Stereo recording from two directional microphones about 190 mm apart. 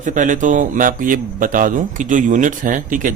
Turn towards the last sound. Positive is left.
turn(degrees=-45)  # may be behind; listen again after turning